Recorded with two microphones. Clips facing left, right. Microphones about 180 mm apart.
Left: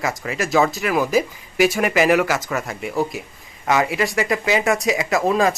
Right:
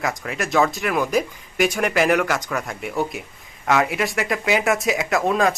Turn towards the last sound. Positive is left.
turn(degrees=0)  # may be behind; listen again after turning